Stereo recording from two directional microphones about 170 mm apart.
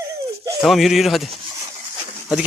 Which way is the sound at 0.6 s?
Centre (ahead or behind).